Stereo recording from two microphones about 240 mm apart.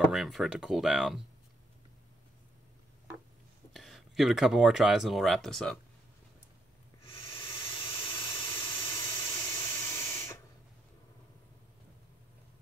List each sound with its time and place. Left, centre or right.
0.1 s speech: centre
3.7 s speech: centre
7.1 s a sound: left
7.5 s vehicle: left
8.8 s spray: centre